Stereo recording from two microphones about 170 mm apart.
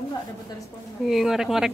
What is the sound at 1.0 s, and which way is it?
Speech, centre (ahead or behind).